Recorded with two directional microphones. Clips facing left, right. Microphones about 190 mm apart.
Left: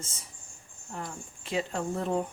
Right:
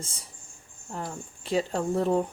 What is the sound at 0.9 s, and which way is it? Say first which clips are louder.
Speech: right 3 dB; 35° right (ahead or behind).